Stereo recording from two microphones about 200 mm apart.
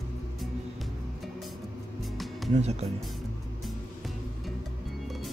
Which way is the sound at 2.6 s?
30° right (ahead or behind).